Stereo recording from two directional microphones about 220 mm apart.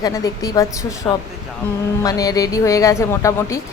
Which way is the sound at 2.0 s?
15° left (ahead or behind).